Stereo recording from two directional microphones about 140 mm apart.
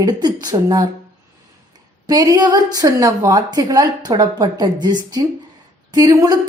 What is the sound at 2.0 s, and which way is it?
A woman's voice, 25° right (ahead or behind).